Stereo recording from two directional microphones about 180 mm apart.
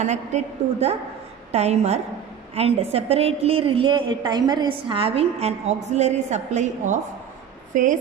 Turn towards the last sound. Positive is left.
turn(degrees=-45)  # may be behind; listen again after turning